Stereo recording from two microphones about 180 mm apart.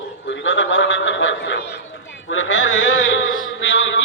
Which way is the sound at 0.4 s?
90° left.